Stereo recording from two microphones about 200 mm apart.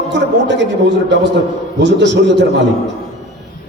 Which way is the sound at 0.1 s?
60° right (ahead or behind).